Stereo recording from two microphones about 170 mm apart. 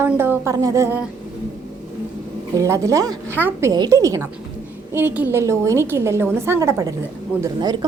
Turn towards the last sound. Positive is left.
turn(degrees=-20)  # may be behind; listen again after turning